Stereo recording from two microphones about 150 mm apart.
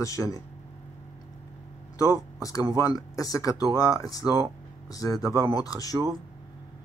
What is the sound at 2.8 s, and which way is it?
Speech, 25° left (ahead or behind).